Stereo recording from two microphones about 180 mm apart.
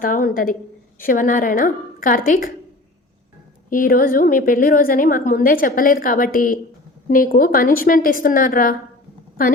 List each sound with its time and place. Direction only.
0.0 s a woman's voice: 50° left (ahead or behind)
3.7 s a woman's voice: 50° left (ahead or behind)